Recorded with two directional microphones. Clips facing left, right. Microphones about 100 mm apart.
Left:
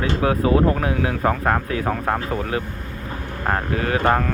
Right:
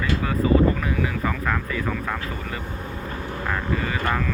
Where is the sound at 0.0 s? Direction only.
70° left (ahead or behind); by 2.2 s 50° left (ahead or behind).